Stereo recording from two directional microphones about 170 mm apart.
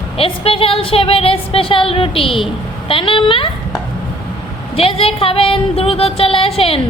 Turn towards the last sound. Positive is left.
turn(degrees=35)  # may be behind; listen again after turning